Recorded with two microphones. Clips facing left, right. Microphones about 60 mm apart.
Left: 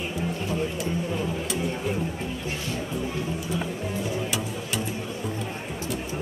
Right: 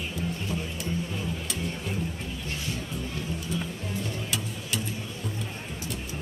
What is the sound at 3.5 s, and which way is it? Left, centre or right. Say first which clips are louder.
Music: left 4 dB; centre.